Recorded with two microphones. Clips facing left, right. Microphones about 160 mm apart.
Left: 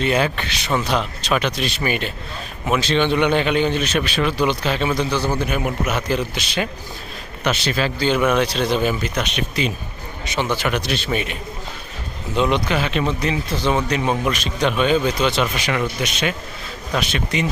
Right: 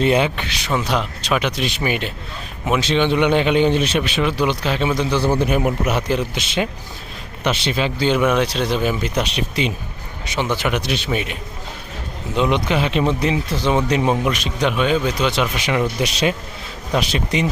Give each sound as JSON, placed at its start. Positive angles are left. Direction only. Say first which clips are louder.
{"t": 0.0, "sound": "a man's voice", "louder": "right 3 dB", "side_deg": -25}
{"t": 0.7, "sound": "a man's voice", "louder": "even", "side_deg": -10}
{"t": 5.1, "sound": "a man's voice", "louder": "right 4 dB", "side_deg": -30}
{"t": 8.2, "sound": "a man's voice", "louder": "even", "side_deg": -5}
{"t": 9.0, "sound": "a man's voice", "louder": "right 2 dB", "side_deg": -30}
{"t": 10.2, "sound": "a man's voice", "louder": "right 1 dB", "side_deg": -15}
{"t": 12.4, "sound": "a man's voice", "louder": "right 1 dB", "side_deg": -15}
{"t": 13.8, "sound": "a man's voice", "louder": "right 3 dB", "side_deg": -25}
{"t": 14.3, "sound": "a man's voice", "louder": "even", "side_deg": -15}
{"t": 16.0, "sound": "a man's voice", "louder": "right 3 dB", "side_deg": -30}